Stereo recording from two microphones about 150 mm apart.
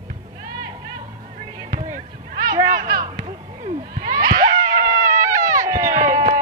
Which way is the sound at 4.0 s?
25° right (ahead or behind).